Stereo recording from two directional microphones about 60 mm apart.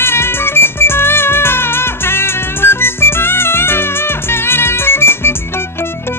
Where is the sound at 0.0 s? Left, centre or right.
Left.